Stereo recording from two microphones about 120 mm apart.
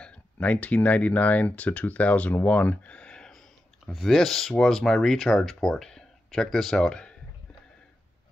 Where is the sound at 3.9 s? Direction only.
Centre (ahead or behind).